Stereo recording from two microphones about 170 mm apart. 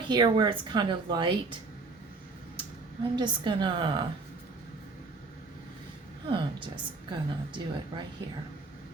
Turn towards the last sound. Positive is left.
turn(degrees=-25)  # may be behind; listen again after turning